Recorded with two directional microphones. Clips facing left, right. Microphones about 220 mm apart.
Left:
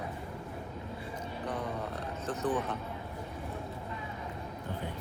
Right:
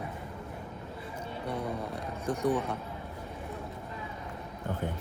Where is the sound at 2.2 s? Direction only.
10° right (ahead or behind).